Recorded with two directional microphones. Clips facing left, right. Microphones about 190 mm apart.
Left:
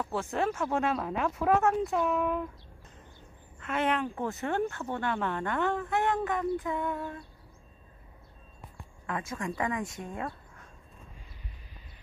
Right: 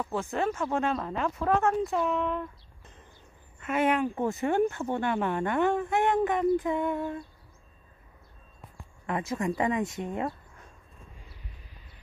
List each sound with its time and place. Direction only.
0.0 s speech: centre (ahead or behind)
3.5 s speech: 10° right (ahead or behind)
9.0 s speech: 25° right (ahead or behind)